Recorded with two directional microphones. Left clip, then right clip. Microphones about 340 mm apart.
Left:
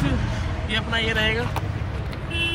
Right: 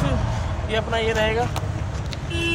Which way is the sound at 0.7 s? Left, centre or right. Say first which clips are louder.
Right 1 dB; right.